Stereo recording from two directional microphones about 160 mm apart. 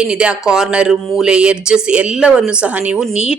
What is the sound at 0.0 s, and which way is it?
A woman's voice, 5° right (ahead or behind).